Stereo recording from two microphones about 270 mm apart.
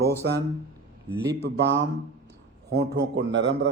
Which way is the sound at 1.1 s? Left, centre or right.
Right.